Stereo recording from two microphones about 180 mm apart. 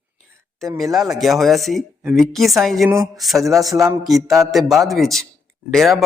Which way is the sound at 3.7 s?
20° right (ahead or behind).